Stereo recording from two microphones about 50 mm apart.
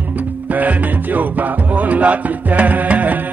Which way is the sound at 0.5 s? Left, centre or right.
Right.